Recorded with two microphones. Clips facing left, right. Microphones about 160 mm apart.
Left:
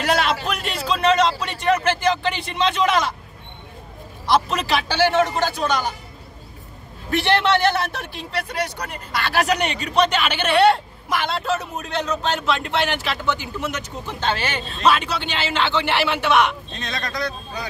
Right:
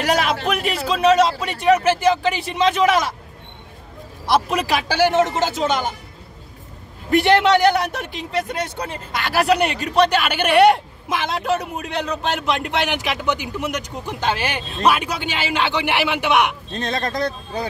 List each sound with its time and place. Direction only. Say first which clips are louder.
0.0 s a sound: right 1 dB; 10° right (ahead or behind)
0.5 s speech: right 3 dB; 5° right (ahead or behind)
4.3 s a man's voice: right 1 dB; 10° right (ahead or behind)
7.1 s speech: right 4 dB; 15° right (ahead or behind)
9.3 s speech: right 4 dB; 5° right (ahead or behind)
16.7 s speech: right 5 dB; 35° right (ahead or behind)